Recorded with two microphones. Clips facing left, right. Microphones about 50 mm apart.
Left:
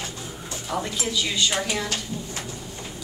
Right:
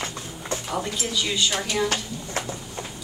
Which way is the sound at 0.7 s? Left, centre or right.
Centre.